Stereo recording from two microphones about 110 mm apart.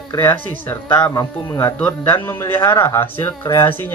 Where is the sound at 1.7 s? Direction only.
15° left (ahead or behind).